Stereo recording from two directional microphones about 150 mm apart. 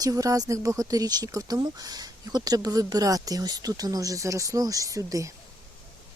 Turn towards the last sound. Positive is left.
turn(degrees=-20)  # may be behind; listen again after turning